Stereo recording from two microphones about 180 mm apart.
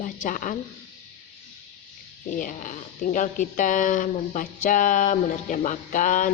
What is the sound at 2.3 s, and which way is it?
Speech, 45° left (ahead or behind).